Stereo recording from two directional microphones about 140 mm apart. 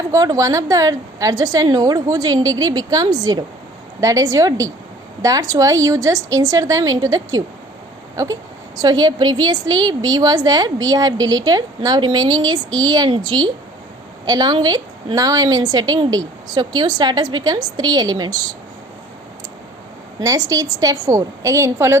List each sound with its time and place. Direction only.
0.1 s a woman's voice: 25° right (ahead or behind)
20.1 s a woman's voice: 25° right (ahead or behind)